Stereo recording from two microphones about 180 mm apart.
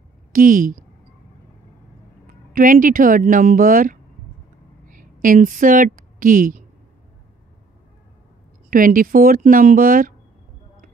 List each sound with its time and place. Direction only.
0.3 s speech: 50° right (ahead or behind)
2.5 s speech: 50° right (ahead or behind)
4.8 s a sound: 50° right (ahead or behind)
8.6 s speech: 50° right (ahead or behind)